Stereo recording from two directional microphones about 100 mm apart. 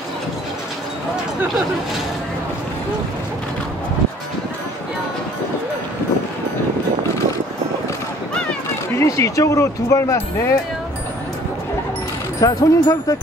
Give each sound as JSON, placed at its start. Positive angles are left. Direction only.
{"t": 8.9, "sound": "speech", "side_deg": 30}
{"t": 12.4, "sound": "speech", "side_deg": 40}